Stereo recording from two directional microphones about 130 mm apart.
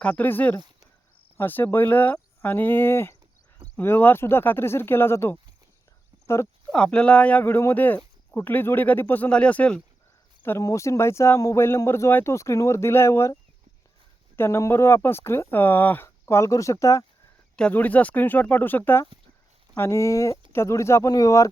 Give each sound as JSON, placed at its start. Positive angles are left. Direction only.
{"t": 0.0, "sound": "speech", "side_deg": 10}
{"t": 6.7, "sound": "speech", "side_deg": 5}
{"t": 10.4, "sound": "speech", "side_deg": 20}
{"t": 14.3, "sound": "speech", "side_deg": 20}
{"t": 17.6, "sound": "speech", "side_deg": 10}